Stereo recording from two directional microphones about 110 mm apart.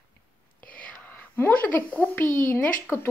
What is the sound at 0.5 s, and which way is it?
Speech, 15° left (ahead or behind).